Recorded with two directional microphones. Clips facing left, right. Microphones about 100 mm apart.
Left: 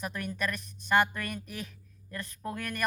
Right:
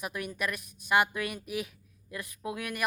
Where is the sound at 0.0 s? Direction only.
10° right (ahead or behind).